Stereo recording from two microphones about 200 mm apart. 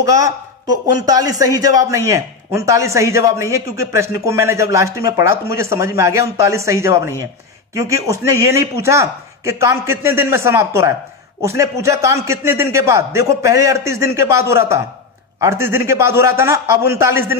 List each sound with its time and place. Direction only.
0.0 s a man's voice: 15° right (ahead or behind)